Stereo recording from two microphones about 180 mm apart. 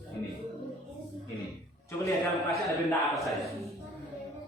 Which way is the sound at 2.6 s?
Centre (ahead or behind).